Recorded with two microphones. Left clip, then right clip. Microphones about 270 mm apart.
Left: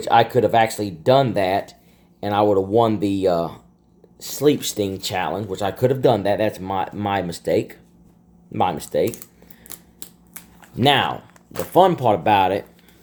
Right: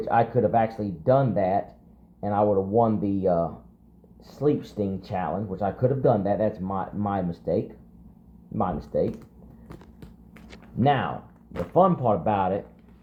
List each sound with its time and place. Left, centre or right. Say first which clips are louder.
0.0 s speech: left 6 dB; left
8.5 s speech: left 6 dB; left
9.6 s scissors: left 4 dB; centre
10.8 s speech: left 6 dB; left